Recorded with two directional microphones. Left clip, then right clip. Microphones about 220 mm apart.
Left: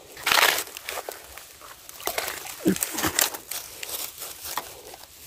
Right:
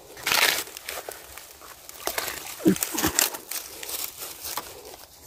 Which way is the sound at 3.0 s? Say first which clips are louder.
Even; 30° right (ahead or behind).